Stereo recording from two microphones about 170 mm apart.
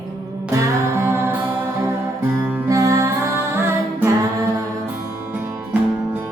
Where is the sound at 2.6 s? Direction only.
20° right (ahead or behind).